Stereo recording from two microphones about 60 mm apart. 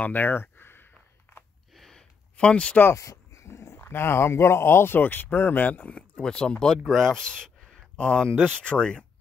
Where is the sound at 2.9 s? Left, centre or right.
Left.